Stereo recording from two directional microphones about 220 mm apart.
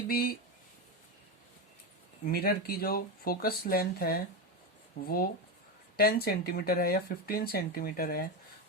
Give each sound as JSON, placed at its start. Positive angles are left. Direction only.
{"t": 0.1, "sound": "speech", "side_deg": 45}
{"t": 2.2, "sound": "speech", "side_deg": 45}